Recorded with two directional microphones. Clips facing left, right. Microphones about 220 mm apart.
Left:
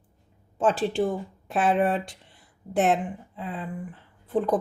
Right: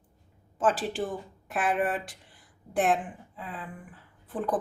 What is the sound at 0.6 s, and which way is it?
Speech, 25° left (ahead or behind).